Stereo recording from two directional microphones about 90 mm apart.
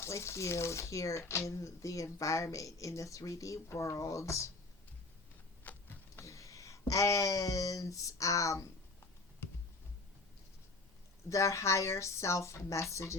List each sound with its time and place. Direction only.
0.0 s speech: 30° left (ahead or behind)
5.6 s a sound: 20° left (ahead or behind)
6.2 s speech: 35° left (ahead or behind)
11.3 s speech: 35° left (ahead or behind)